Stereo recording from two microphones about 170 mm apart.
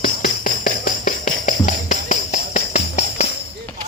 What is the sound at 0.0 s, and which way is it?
Tambourine, 50° left (ahead or behind).